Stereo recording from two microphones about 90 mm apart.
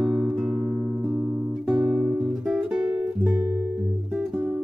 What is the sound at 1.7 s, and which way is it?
Guitar, 5° right (ahead or behind).